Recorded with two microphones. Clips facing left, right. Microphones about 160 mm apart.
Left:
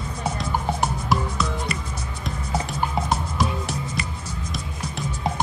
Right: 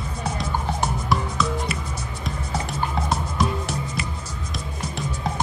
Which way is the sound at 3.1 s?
Centre (ahead or behind).